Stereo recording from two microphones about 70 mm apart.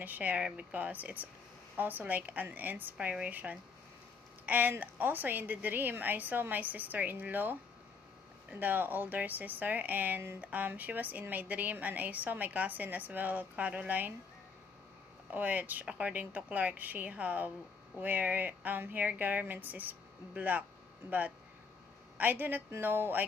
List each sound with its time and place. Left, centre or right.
0.0 s a woman's voice: right
8.5 s a woman's voice: right
15.3 s a woman's voice: right
22.1 s a woman's voice: right